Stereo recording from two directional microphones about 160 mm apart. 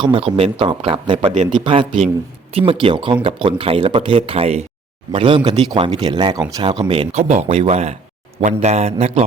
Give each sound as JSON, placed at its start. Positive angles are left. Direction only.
{"t": 0.0, "sound": "a man's voice", "side_deg": -35}